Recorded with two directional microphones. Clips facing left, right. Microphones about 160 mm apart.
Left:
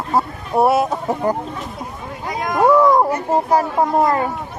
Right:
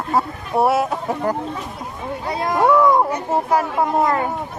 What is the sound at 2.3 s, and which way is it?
Speech, 30° right (ahead or behind).